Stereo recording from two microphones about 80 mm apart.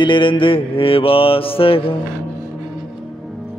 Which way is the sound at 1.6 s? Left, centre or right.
Left.